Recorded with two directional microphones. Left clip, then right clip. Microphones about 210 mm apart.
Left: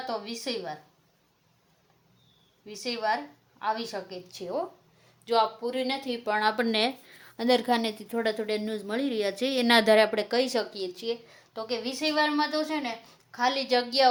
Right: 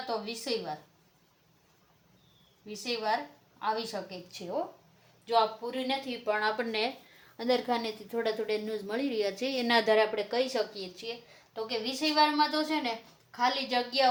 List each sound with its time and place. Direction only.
0.3 s a woman's voice: 35° left (ahead or behind)
2.8 s a woman's voice: 35° left (ahead or behind)